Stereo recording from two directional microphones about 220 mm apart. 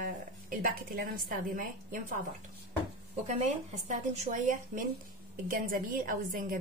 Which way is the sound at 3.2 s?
30° right (ahead or behind).